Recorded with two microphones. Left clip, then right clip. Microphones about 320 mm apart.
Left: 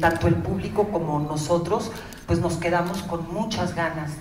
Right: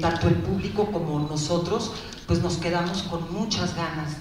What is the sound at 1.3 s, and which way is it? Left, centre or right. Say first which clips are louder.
A woman's voice: left 2 dB; left.